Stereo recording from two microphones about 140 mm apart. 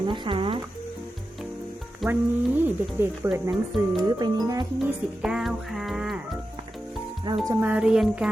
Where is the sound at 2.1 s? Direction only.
15° right (ahead or behind).